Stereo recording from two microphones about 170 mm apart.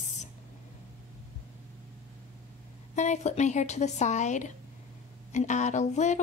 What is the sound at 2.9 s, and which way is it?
A woman's voice, 45° left (ahead or behind).